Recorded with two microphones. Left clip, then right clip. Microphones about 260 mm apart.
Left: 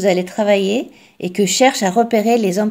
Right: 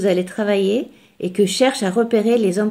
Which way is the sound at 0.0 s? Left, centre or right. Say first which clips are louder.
Left 3 dB; centre.